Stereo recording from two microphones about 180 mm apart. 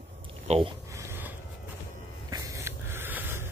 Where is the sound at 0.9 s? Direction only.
10° right (ahead or behind).